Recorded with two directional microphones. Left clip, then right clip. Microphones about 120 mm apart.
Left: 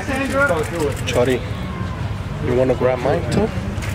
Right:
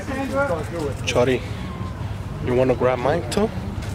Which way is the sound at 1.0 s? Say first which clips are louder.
Even; 40° right (ahead or behind).